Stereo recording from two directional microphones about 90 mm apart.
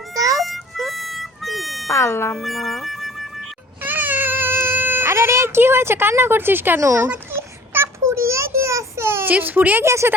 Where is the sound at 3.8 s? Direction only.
20° right (ahead or behind).